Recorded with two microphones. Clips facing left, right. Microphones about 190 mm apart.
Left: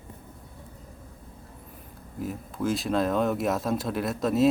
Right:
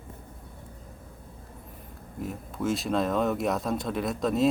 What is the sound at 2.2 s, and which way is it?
Speech, centre (ahead or behind).